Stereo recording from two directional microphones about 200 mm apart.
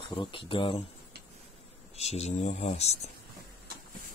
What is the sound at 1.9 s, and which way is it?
Speech, 35° left (ahead or behind).